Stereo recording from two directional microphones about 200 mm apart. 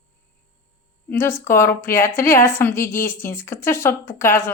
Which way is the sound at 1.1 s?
15° left (ahead or behind).